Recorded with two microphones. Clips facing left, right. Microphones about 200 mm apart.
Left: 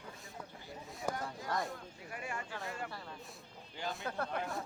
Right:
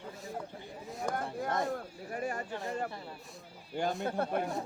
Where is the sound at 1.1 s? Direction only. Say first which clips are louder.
Right 8 dB; 55° right (ahead or behind).